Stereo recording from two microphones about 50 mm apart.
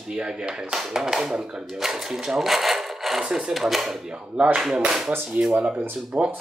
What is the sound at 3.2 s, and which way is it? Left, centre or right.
Speech, centre.